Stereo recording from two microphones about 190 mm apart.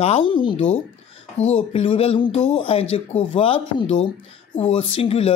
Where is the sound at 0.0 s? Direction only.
30° left (ahead or behind).